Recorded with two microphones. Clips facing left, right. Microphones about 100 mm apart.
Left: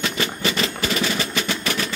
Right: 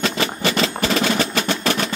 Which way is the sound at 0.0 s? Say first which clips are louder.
Right 3 dB; 90° right.